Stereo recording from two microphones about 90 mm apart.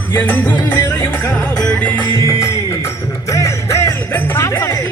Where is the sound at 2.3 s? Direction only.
35° left (ahead or behind).